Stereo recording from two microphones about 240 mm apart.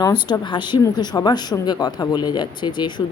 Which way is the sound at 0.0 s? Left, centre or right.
Centre.